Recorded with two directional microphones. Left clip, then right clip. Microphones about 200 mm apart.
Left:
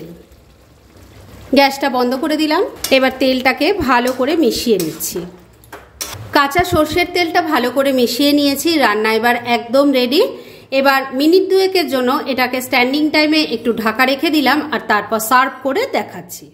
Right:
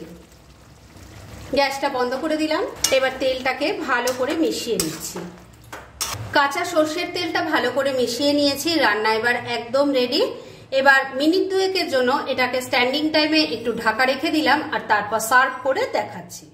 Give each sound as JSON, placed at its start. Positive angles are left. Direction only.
{"t": 1.5, "sound": "speech", "side_deg": 45}
{"t": 6.3, "sound": "a woman's voice", "side_deg": 40}